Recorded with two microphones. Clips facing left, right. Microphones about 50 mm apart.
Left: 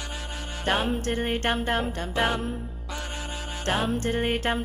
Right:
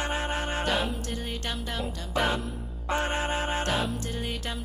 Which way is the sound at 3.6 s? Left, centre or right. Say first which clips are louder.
Left 4 dB; left.